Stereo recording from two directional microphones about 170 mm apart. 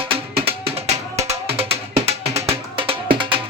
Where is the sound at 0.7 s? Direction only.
40° right (ahead or behind).